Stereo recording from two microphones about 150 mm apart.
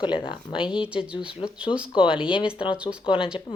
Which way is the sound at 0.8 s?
5° right (ahead or behind).